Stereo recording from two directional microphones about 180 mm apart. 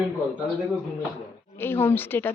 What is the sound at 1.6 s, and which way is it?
Speech, 10° left (ahead or behind).